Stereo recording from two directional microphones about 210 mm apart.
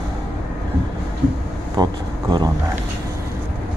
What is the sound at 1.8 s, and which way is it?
Speech, 20° right (ahead or behind).